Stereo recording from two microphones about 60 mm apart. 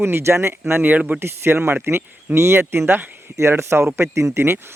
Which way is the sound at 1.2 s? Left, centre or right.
Right.